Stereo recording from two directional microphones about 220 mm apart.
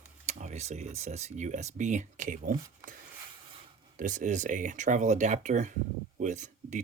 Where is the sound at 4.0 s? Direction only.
35° right (ahead or behind).